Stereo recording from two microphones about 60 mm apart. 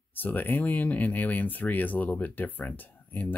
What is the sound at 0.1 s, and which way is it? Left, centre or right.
Speech, left.